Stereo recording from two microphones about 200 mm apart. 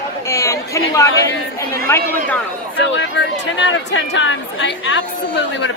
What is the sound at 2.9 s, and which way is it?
Speech, 65° left (ahead or behind).